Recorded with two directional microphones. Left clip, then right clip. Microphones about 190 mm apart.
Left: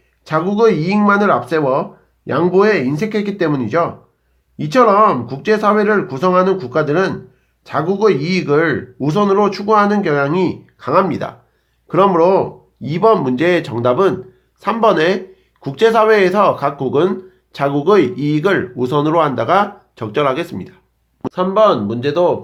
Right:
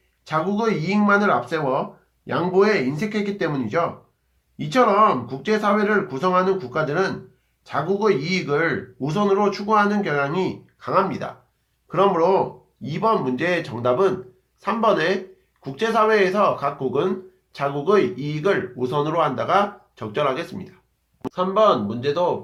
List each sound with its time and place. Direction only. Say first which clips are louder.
0.3 s speech: left 9 dB; 35° left (ahead or behind)